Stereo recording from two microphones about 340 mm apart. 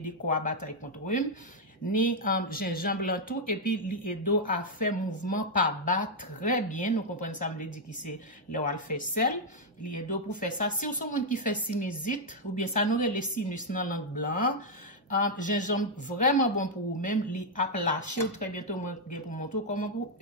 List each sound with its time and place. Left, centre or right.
0.0 s speech: left